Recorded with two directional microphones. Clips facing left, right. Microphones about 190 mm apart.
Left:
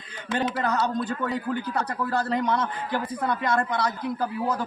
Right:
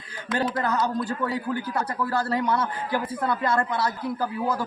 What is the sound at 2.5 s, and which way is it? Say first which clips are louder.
A man's voice: right 1 dB; 5° right (ahead or behind).